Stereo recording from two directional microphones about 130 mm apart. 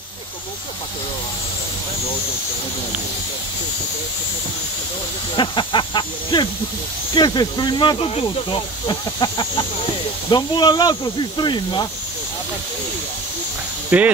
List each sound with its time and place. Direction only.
5.3 s speech: 35° left (ahead or behind)
13.8 s speech: 10° right (ahead or behind)